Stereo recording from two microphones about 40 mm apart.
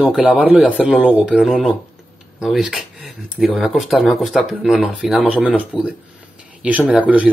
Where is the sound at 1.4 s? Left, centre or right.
Centre.